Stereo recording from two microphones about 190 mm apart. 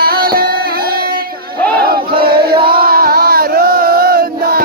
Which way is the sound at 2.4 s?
25° right (ahead or behind).